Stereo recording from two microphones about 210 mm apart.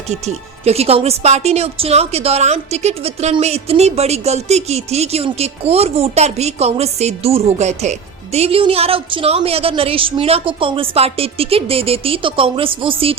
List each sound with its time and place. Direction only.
0.1 s speech: 30° right (ahead or behind)